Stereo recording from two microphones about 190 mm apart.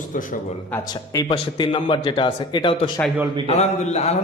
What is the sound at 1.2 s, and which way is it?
Speech, 25° left (ahead or behind).